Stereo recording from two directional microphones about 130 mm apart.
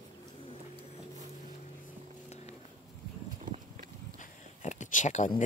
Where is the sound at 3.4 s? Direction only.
75° right (ahead or behind).